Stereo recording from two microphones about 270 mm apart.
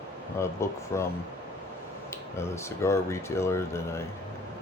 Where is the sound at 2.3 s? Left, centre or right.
Centre.